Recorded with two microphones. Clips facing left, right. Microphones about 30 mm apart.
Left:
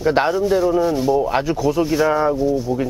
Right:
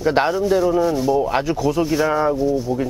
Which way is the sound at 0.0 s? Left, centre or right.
Centre.